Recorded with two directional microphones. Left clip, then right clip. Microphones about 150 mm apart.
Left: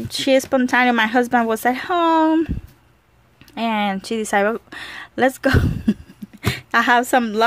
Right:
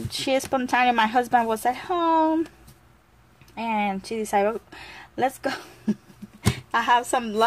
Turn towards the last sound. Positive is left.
turn(degrees=55)  # may be behind; listen again after turning